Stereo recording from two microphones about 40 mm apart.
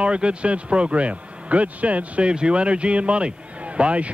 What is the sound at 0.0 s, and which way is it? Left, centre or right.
Speech, right.